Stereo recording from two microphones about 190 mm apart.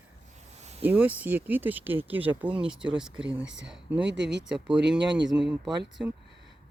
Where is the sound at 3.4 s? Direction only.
75° right (ahead or behind).